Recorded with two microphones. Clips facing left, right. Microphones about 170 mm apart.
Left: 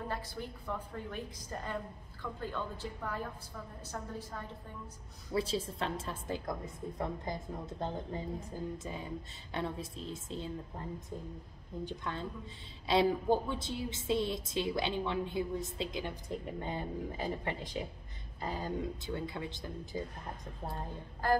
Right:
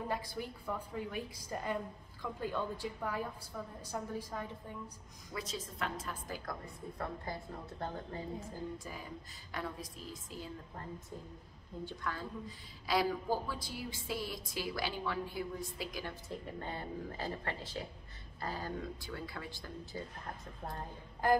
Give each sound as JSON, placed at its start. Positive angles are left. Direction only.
{"t": 0.1, "sound": "a woman's voice", "side_deg": -10}
{"t": 5.3, "sound": "a woman's voice", "side_deg": 30}
{"t": 11.8, "sound": "a woman's voice", "side_deg": 25}
{"t": 21.2, "sound": "a woman's voice", "side_deg": -15}